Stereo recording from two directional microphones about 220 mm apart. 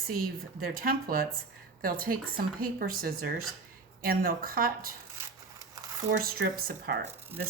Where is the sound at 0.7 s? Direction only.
40° right (ahead or behind).